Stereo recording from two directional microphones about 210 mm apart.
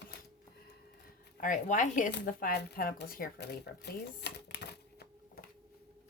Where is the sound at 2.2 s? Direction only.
45° left (ahead or behind).